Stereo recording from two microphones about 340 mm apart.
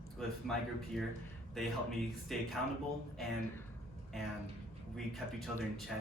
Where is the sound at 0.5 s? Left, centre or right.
Centre.